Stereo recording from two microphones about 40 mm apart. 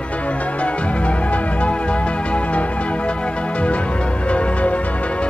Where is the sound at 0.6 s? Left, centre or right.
Left.